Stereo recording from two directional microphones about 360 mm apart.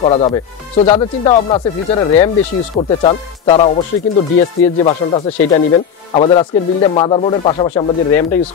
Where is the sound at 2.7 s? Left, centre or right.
Centre.